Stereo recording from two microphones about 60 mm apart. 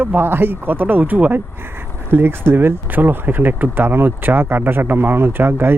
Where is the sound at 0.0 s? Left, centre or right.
Right.